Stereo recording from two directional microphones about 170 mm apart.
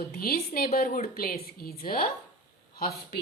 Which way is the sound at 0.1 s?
60° left (ahead or behind).